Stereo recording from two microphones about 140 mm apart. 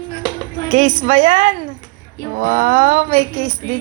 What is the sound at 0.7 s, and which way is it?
A woman's voice, 55° right (ahead or behind).